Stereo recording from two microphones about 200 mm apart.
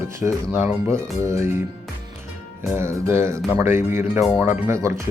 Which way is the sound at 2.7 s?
15° right (ahead or behind).